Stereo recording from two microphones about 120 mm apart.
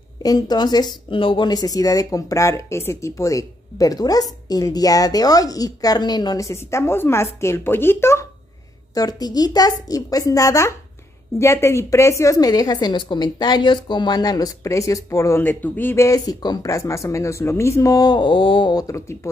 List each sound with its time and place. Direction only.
0.2 s speech: 35° left (ahead or behind)
8.9 s a woman's voice: 35° left (ahead or behind)
18.9 s speech: 25° left (ahead or behind)